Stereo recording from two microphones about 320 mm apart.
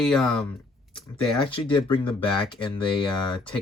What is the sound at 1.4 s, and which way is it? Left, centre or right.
Speech, centre.